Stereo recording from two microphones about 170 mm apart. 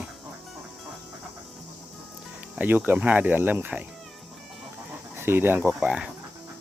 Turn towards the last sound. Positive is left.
turn(degrees=-5)  # may be behind; listen again after turning